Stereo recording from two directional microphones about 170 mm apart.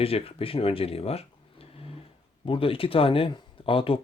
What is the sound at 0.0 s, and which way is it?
Speech, 35° left (ahead or behind).